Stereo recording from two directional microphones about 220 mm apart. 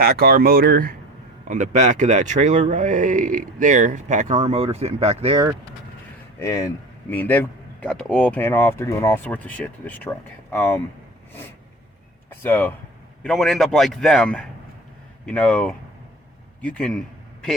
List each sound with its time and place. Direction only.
0.0 s speech: 45° right (ahead or behind); by 5.5 s 25° right (ahead or behind)
6.4 s speech: 15° left (ahead or behind)
12.3 s a man's voice: 10° left (ahead or behind)